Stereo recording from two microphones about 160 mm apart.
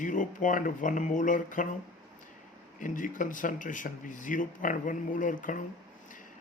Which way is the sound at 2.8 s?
55° left (ahead or behind).